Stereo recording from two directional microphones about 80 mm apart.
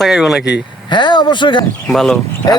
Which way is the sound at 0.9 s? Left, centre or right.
Left.